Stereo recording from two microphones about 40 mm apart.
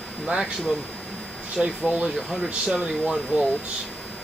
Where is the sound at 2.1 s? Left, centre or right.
Left.